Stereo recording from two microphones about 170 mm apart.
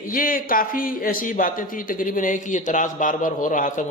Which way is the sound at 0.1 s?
55° left (ahead or behind).